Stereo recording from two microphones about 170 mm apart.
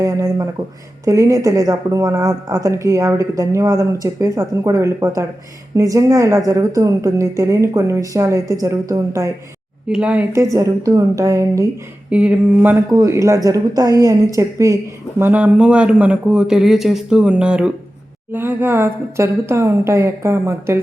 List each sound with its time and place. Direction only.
0.0 s a woman's voice: 20° right (ahead or behind)
9.9 s speech: 5° right (ahead or behind)
12.1 s speech: 5° right (ahead or behind)